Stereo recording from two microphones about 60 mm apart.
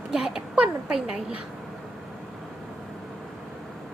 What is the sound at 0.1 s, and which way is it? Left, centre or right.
Speech, centre.